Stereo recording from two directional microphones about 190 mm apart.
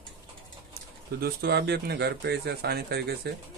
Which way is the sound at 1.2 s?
55° right (ahead or behind).